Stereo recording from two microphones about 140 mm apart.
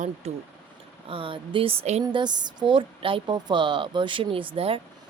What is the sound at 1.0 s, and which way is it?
Speech, 40° right (ahead or behind).